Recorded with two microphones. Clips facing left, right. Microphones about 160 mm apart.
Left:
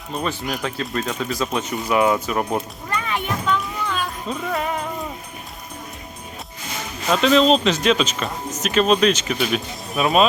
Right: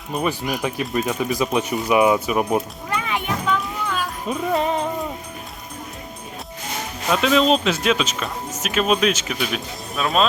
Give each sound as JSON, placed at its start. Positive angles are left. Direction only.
{"t": 0.1, "sound": "speech", "side_deg": -10}
{"t": 4.5, "sound": "music", "side_deg": -25}
{"t": 7.1, "sound": "speech", "side_deg": -5}